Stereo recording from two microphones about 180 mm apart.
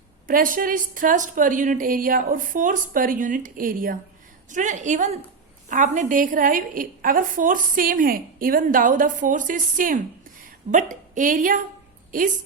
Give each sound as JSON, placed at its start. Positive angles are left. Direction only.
{"t": 0.3, "sound": "a woman's voice", "side_deg": -50}